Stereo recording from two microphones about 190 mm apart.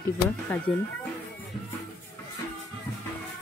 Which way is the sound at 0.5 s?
5° left (ahead or behind).